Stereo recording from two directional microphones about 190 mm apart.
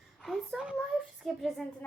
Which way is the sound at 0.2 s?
Centre (ahead or behind).